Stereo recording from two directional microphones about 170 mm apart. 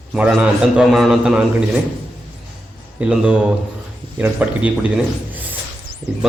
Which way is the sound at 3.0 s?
5° right (ahead or behind).